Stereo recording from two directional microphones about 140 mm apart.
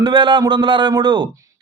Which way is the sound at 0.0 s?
30° right (ahead or behind).